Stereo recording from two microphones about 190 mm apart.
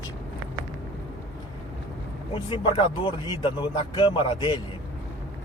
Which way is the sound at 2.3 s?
25° left (ahead or behind).